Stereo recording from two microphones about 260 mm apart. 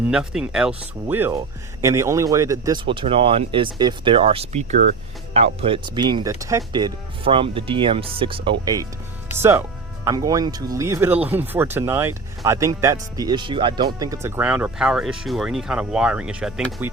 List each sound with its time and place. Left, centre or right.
0.1 s speech: centre